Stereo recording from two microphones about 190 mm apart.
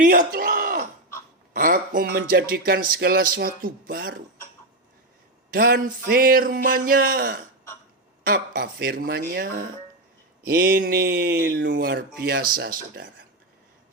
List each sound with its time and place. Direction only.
0.0 s a sound: 45° right (ahead or behind)
1.5 s speech: 45° right (ahead or behind)
5.5 s speech: 50° right (ahead or behind)